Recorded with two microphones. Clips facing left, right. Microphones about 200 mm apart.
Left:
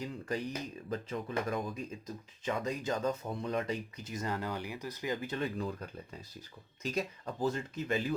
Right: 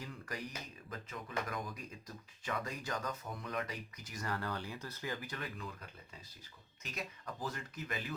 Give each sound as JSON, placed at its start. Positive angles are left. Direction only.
{"t": 0.0, "sound": "speech", "side_deg": 25}
{"t": 6.8, "sound": "speech", "side_deg": 30}